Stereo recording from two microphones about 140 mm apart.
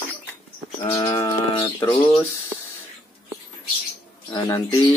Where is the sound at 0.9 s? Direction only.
25° left (ahead or behind).